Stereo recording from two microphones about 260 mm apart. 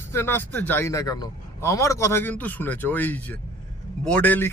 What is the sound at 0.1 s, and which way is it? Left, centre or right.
Speech, centre.